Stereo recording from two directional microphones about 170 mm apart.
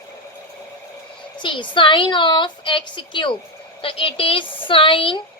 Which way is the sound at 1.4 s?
30° left (ahead or behind).